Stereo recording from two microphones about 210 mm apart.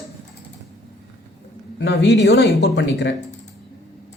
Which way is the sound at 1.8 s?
55° left (ahead or behind).